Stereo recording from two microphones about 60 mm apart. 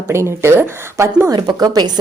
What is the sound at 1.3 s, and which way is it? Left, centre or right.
Speech, right.